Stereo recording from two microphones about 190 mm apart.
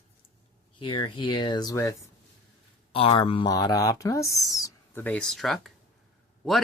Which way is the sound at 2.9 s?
30° left (ahead or behind).